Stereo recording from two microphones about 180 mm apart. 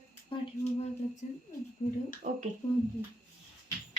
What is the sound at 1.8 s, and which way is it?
Speech, 40° left (ahead or behind).